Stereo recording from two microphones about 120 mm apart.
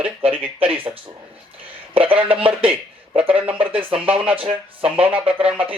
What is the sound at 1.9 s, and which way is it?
Speech, 50° right (ahead or behind).